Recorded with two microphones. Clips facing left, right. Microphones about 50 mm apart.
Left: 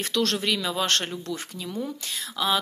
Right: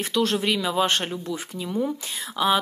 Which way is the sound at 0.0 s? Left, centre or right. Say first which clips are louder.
Right 2 dB; centre.